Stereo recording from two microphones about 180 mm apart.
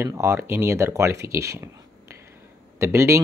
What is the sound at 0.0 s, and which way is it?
Speech, 15° right (ahead or behind).